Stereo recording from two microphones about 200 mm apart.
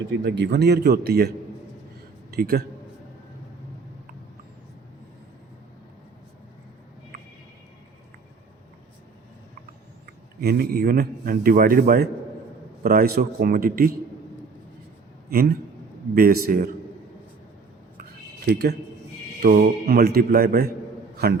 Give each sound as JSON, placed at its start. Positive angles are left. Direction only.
{"t": 0.3, "sound": "a man's voice", "side_deg": -55}
{"t": 2.3, "sound": "a man's voice", "side_deg": -50}
{"t": 10.4, "sound": "a man's voice", "side_deg": -50}
{"t": 15.3, "sound": "a man's voice", "side_deg": -50}
{"t": 19.4, "sound": "a man's voice", "side_deg": -50}